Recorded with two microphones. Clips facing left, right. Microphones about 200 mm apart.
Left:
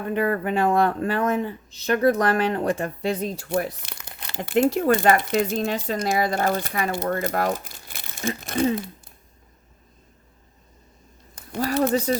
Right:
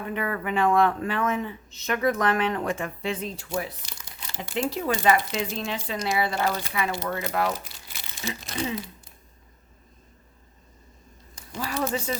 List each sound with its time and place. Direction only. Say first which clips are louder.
0.1 s speech: left 6 dB; 40° left (ahead or behind)
3.5 s speech: left 6 dB; 60° left (ahead or behind)
11.4 s a sound: left 4 dB; 55° left (ahead or behind)